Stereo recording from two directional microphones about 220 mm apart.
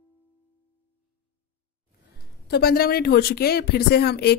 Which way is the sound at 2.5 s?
45° left (ahead or behind).